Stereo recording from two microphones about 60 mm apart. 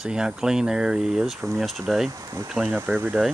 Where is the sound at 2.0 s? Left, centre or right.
Right.